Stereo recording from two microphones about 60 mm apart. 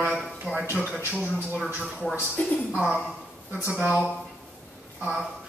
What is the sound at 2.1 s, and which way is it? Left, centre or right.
Speech, left.